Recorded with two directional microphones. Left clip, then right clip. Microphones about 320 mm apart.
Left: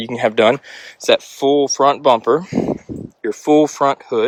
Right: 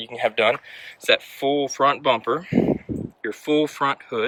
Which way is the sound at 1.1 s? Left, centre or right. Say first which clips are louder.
Left 6 dB; centre.